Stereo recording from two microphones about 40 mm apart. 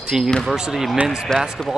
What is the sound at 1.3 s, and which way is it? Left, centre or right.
Speech, centre.